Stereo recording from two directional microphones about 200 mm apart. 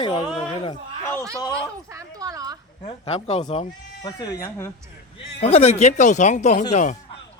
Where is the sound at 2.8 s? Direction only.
25° left (ahead or behind).